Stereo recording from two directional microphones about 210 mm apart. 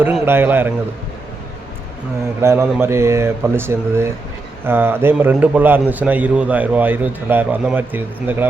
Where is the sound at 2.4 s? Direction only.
10° right (ahead or behind).